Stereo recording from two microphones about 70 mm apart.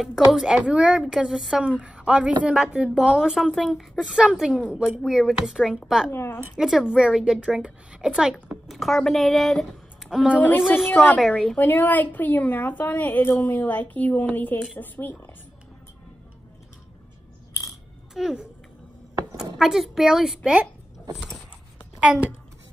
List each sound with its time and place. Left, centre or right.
0.3 s a woman's voice: centre
6.0 s speech: left
6.5 s a woman's voice: centre
8.6 s a woman's voice: centre
9.7 s a sound: centre
10.6 s a woman's voice: centre
11.5 s a woman's voice: left
18.1 s a child's voice: centre
22.0 s a child's voice: centre